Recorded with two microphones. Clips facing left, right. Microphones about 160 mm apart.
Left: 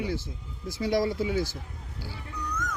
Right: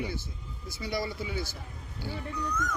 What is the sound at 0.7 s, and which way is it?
Speech, 90° left.